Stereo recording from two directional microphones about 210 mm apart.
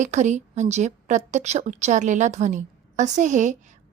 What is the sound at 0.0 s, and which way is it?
A woman's voice, 35° right (ahead or behind).